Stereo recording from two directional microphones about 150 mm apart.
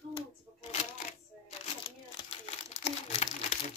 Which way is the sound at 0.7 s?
55° left (ahead or behind).